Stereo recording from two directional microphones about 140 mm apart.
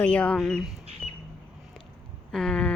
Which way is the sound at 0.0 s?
10° left (ahead or behind).